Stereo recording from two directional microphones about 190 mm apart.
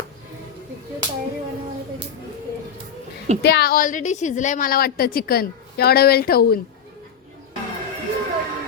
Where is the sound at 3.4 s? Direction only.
60° left (ahead or behind).